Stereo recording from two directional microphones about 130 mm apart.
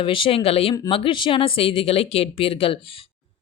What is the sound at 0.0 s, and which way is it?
Speech, 40° left (ahead or behind).